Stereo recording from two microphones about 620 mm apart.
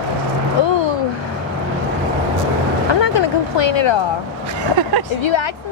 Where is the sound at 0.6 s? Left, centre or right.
Left.